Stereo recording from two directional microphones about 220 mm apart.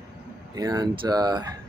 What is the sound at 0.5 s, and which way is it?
Speech, 15° right (ahead or behind).